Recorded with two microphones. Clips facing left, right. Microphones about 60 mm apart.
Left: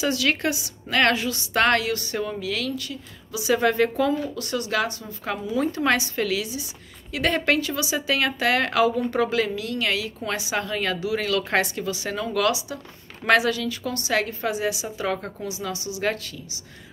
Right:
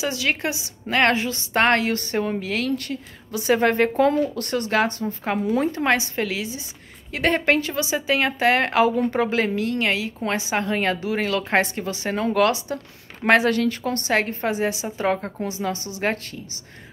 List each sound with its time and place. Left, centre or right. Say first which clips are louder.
0.0 s a woman's voice: left 1 dB; right